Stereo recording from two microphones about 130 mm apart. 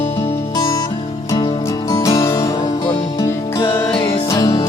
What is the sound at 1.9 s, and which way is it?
Music, 25° left (ahead or behind).